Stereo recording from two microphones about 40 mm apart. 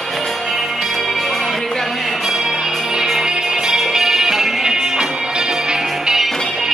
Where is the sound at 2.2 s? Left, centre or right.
Centre.